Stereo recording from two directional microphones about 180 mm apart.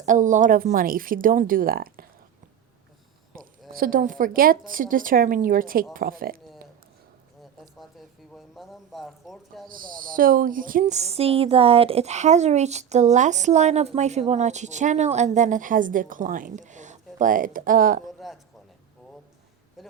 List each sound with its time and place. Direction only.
0.0 s a woman's voice: 45° right (ahead or behind)
3.7 s a woman's voice: 50° right (ahead or behind)
8.3 s speech: centre (ahead or behind)
9.6 s speech: 50° right (ahead or behind)
18.2 s a sound: centre (ahead or behind)
19.8 s a sound: centre (ahead or behind)